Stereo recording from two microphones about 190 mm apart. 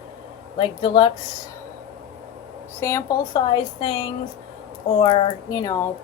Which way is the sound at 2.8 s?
15° left (ahead or behind).